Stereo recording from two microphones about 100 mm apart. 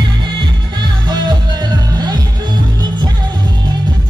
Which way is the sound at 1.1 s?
45° right (ahead or behind).